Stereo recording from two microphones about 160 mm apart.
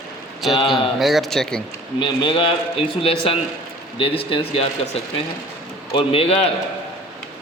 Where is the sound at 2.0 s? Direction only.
30° left (ahead or behind).